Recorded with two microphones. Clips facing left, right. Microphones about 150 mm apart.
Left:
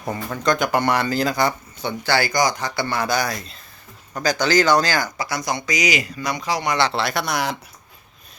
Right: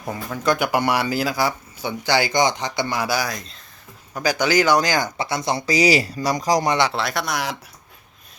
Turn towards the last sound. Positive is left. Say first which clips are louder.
# left 2 dB
turn(degrees=0)  # may be behind; listen again after turning